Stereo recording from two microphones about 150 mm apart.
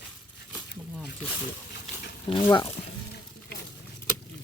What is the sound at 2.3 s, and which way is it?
Speech, 30° left (ahead or behind).